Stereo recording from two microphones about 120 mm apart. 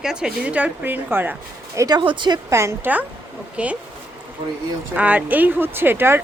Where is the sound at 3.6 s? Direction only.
10° right (ahead or behind).